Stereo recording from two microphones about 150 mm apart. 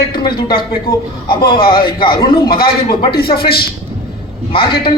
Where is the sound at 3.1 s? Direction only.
90° left.